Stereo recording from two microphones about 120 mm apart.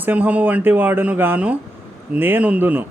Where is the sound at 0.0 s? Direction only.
15° right (ahead or behind).